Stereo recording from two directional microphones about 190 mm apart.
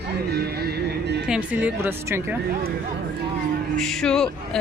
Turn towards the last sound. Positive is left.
turn(degrees=5)  # may be behind; listen again after turning